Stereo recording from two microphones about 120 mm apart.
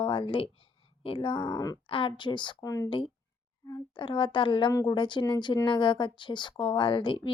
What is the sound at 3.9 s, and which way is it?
Speech, 45° left (ahead or behind).